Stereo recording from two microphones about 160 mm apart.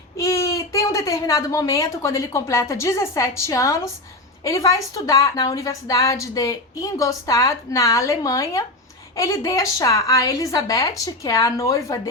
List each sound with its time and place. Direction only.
0.2 s a woman's voice: 20° left (ahead or behind)